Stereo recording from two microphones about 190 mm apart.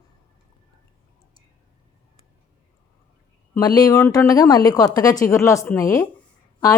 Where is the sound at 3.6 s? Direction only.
20° left (ahead or behind).